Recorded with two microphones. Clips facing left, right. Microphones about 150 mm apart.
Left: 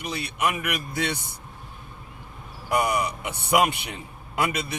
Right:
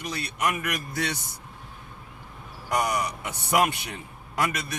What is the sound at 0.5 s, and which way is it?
Speech, 20° left (ahead or behind).